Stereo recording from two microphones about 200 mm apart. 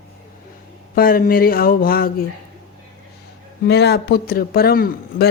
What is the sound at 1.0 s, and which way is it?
Speech, 45° left (ahead or behind).